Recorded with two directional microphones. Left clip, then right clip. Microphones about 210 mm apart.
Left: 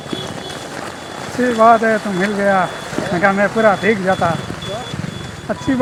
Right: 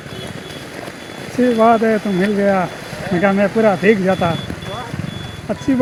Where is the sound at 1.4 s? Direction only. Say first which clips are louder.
Left 2 dB; 50° right (ahead or behind).